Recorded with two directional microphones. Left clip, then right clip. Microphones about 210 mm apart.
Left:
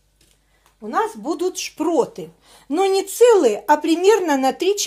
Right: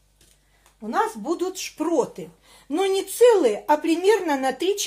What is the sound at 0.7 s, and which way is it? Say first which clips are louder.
Speech: left 2 dB; 40° left (ahead or behind).